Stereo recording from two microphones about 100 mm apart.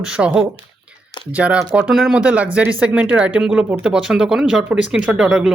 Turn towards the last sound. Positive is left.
turn(degrees=-5)  # may be behind; listen again after turning